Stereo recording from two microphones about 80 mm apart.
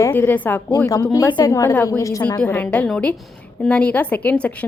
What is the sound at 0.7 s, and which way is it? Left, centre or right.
Speech, left.